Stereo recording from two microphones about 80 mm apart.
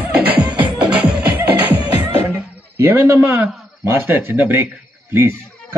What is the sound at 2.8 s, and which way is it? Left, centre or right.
A man's voice, right.